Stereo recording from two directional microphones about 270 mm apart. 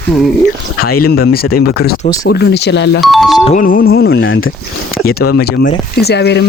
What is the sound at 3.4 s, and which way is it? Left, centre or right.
Speech, left.